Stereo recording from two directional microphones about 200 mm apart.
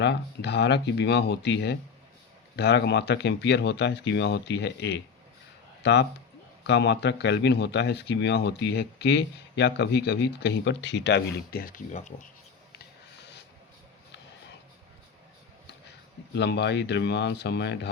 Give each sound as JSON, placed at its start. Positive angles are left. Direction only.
{"t": 0.0, "sound": "speech", "side_deg": 55}
{"t": 12.8, "sound": "a sound", "side_deg": 55}
{"t": 16.3, "sound": "speech", "side_deg": 60}